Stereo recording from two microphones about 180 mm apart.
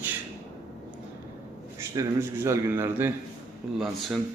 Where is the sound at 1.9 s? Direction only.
15° right (ahead or behind).